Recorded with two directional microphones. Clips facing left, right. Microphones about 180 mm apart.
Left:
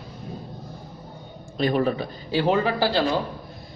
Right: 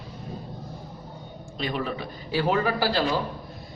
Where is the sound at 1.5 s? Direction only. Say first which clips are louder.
Left 8 dB; 45° left (ahead or behind).